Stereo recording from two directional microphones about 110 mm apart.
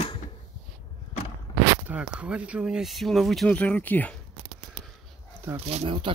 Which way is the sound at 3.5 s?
15° left (ahead or behind).